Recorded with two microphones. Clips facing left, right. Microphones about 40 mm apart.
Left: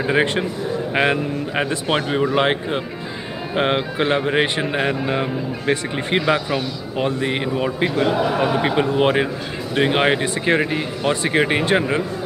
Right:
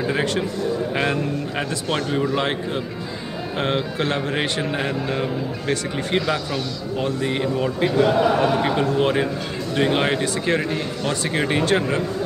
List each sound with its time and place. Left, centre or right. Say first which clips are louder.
0.0 s speech: left 3 dB; left